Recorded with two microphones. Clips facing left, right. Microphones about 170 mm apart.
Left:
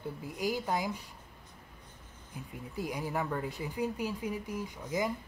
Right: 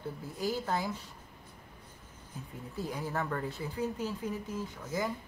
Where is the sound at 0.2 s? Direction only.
15° left (ahead or behind).